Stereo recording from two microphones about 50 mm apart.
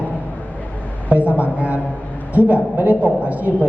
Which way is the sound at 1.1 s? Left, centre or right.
Right.